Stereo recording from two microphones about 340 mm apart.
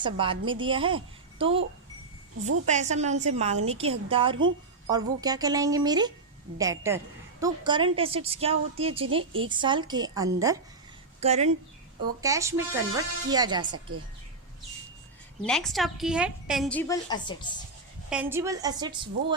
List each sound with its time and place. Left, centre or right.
0.0 s a woman's voice: centre
2.6 s a woman's voice: centre
13.7 s a woman's voice: right
15.4 s a woman's voice: centre
18.1 s a woman's voice: centre